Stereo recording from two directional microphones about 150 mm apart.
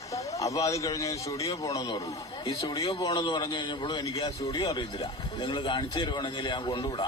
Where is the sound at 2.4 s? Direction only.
30° left (ahead or behind).